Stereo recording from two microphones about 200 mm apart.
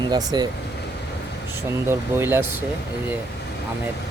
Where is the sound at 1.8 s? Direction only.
10° right (ahead or behind).